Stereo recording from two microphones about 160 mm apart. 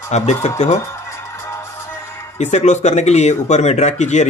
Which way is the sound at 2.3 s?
45° left (ahead or behind).